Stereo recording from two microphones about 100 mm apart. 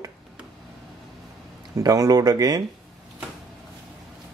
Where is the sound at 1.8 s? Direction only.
35° right (ahead or behind).